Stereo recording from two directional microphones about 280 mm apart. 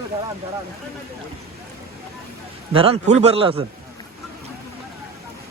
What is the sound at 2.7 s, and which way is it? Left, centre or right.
Speech, centre.